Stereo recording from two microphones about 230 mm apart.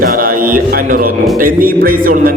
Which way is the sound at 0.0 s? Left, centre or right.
Right.